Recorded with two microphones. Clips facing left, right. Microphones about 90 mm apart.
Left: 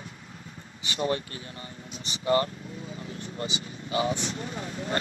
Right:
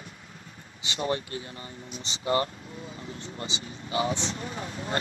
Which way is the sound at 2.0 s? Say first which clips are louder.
Left 2 dB; 25° right (ahead or behind).